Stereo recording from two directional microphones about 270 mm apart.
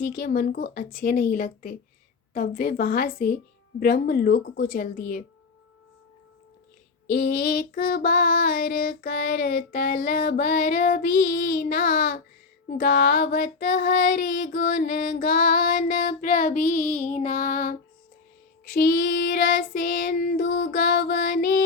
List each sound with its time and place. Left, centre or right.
0.0 s female singing: left
7.1 s female singing: left